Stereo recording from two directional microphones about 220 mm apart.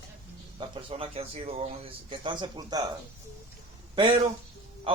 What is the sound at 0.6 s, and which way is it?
A man's voice, 25° right (ahead or behind).